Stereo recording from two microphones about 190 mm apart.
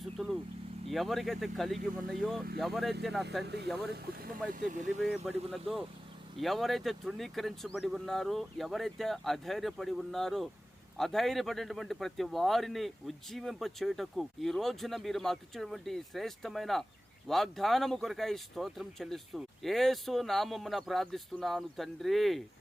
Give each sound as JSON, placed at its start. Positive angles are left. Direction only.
{"t": 0.2, "sound": "vehicle", "side_deg": 0}
{"t": 0.9, "sound": "speech", "side_deg": 0}
{"t": 3.4, "sound": "speech", "side_deg": -60}
{"t": 5.0, "sound": "speech", "side_deg": 0}